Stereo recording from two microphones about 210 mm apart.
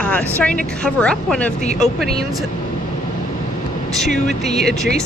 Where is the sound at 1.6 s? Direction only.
35° left (ahead or behind).